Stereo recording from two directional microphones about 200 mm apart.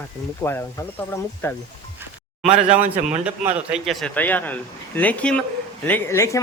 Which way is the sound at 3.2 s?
5° right (ahead or behind).